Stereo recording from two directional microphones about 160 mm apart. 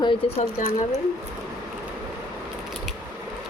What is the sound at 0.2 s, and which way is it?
Speech, 35° left (ahead or behind).